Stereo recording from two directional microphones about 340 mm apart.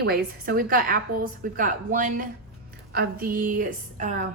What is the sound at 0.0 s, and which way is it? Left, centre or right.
A woman's voice, right.